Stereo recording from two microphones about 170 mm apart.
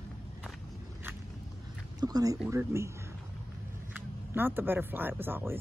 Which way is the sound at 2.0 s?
20° right (ahead or behind).